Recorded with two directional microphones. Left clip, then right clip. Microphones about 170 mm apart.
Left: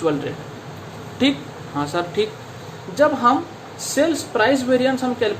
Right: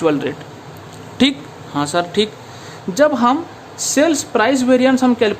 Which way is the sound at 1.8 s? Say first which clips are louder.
Right 5 dB; 40° right (ahead or behind).